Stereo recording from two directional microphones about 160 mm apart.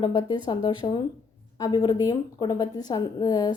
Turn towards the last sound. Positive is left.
turn(degrees=25)  # may be behind; listen again after turning